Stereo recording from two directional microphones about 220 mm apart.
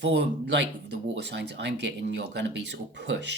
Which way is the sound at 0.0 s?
50° right (ahead or behind).